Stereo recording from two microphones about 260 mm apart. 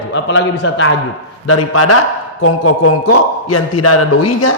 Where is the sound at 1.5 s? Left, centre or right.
Left.